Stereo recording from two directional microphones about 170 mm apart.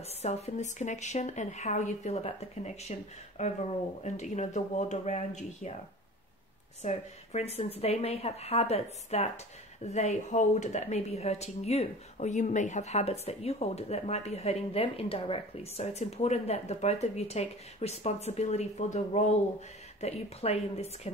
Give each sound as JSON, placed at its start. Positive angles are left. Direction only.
{"t": 0.2, "sound": "speech", "side_deg": 40}
{"t": 6.8, "sound": "speech", "side_deg": 40}